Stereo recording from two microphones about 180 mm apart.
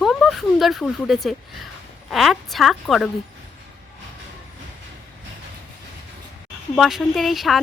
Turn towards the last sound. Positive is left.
turn(degrees=0)  # may be behind; listen again after turning